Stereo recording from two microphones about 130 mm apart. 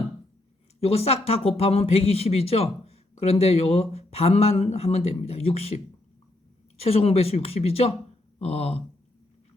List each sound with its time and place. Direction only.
0.8 s speech: 50° left (ahead or behind)